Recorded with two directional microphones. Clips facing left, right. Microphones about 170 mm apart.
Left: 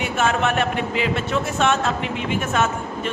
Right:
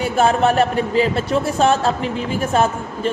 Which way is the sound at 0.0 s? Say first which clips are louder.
Right 5 dB; 35° right (ahead or behind).